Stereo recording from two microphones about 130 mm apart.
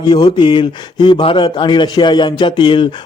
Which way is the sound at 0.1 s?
35° left (ahead or behind).